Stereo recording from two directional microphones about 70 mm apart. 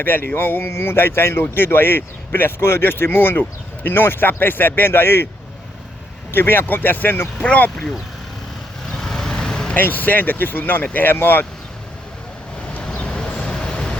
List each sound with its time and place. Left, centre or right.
0.0 s speech: left
6.3 s speech: left
8.9 s vehicle: centre
9.7 s speech: left
12.8 s vehicle: centre